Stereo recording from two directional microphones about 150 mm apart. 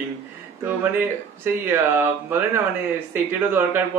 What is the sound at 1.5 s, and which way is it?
Speech, 15° right (ahead or behind).